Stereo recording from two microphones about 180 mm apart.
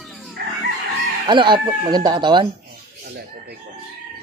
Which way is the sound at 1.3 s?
25° right (ahead or behind).